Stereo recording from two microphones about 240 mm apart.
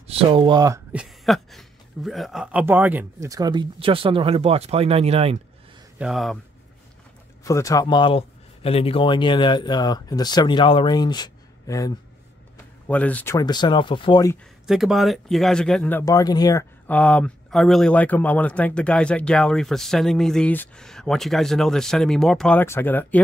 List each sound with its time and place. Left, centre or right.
0.0 s speech: right
0.9 s speech: centre; by 5.4 s right
5.9 s speech: centre
7.4 s speech: centre
14.7 s speech: centre